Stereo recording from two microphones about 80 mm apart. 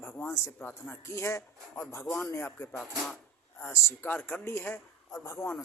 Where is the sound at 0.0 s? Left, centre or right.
Left.